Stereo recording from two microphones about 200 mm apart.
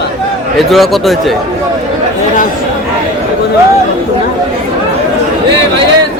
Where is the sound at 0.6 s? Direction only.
Centre (ahead or behind).